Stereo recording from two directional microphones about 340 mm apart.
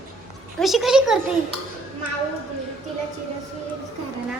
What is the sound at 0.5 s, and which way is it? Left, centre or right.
Speech, centre.